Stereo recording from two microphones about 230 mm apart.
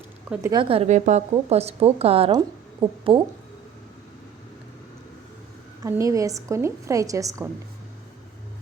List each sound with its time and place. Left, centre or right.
0.3 s a woman's voice: centre
0.6 s a woman's voice: right
2.8 s speech: centre
5.8 s a woman's voice: centre